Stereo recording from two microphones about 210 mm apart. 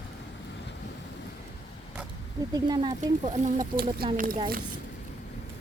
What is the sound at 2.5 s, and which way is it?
Speech, 20° right (ahead or behind).